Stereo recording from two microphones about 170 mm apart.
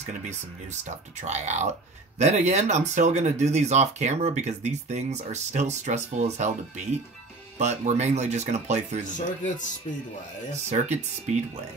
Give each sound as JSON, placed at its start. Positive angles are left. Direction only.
{"t": 0.8, "sound": "speech", "side_deg": -45}
{"t": 7.5, "sound": "speech", "side_deg": -45}
{"t": 9.0, "sound": "speech", "side_deg": 50}
{"t": 10.7, "sound": "speech", "side_deg": -45}